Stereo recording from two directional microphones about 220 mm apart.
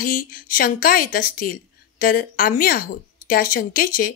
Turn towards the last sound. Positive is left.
turn(degrees=40)  # may be behind; listen again after turning